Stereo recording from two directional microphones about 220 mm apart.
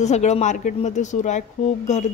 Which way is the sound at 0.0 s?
30° left (ahead or behind).